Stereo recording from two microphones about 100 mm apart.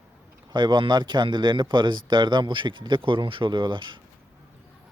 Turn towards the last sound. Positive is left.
turn(degrees=-55)  # may be behind; listen again after turning